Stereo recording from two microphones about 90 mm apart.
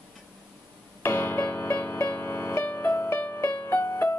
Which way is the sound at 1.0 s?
25° left (ahead or behind).